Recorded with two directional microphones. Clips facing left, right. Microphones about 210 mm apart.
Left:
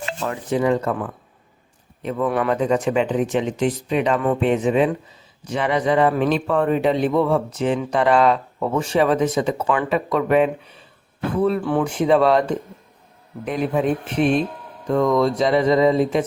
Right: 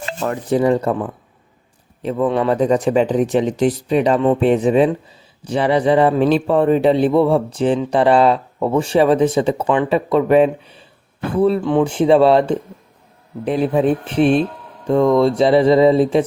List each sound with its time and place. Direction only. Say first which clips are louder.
0.0 s speech: right 4 dB; 40° right (ahead or behind)
2.1 s speech: right 4 dB; 25° right (ahead or behind)
2.6 s a man's voice: right 4 dB; 35° right (ahead or behind)